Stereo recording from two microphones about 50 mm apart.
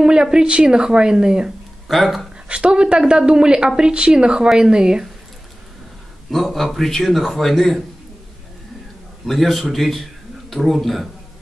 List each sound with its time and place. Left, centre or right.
0.0 s a woman's voice: centre
1.9 s a man's voice: centre
2.4 s a woman's voice: right
6.3 s a man's voice: centre
9.2 s a man's voice: centre